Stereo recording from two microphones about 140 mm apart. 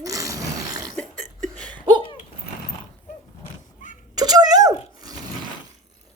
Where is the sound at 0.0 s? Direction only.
25° right (ahead or behind).